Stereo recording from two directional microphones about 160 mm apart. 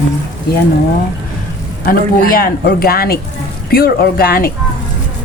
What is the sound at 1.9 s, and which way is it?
Speech, 65° left (ahead or behind).